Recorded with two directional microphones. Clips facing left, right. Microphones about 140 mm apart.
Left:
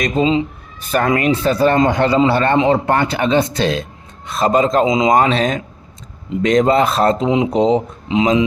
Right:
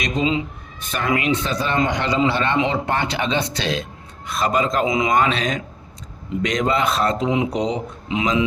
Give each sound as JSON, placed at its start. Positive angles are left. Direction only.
{"t": 0.0, "sound": "speech", "side_deg": 35}
{"t": 0.9, "sound": "speech", "side_deg": 45}
{"t": 4.4, "sound": "speech", "side_deg": 35}
{"t": 4.9, "sound": "speech", "side_deg": 20}
{"t": 5.1, "sound": "speech", "side_deg": 35}